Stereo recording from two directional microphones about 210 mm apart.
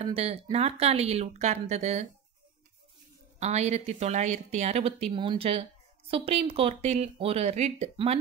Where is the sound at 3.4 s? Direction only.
30° right (ahead or behind).